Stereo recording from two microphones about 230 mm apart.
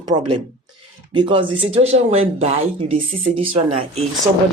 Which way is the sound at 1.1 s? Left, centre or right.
Right.